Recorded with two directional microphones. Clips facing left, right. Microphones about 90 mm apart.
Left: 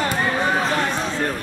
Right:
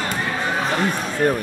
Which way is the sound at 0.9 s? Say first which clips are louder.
Right 3 dB; 10° right (ahead or behind).